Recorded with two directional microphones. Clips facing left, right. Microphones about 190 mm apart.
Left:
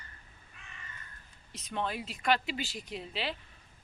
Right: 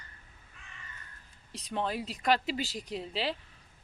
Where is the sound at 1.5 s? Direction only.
35° right (ahead or behind).